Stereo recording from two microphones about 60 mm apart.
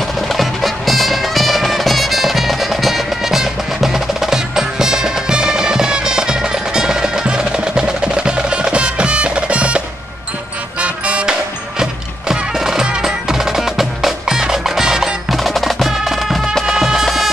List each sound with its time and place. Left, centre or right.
0.3 s music: centre
11.8 s music: centre